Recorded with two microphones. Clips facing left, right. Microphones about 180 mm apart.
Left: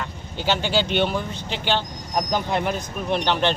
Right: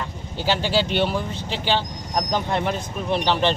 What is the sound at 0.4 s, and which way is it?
Speech, centre (ahead or behind).